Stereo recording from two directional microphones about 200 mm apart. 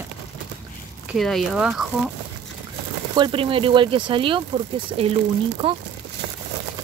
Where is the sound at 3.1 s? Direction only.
25° right (ahead or behind).